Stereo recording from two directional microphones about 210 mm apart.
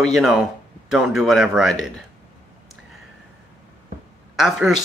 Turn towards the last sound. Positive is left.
turn(degrees=0)  # may be behind; listen again after turning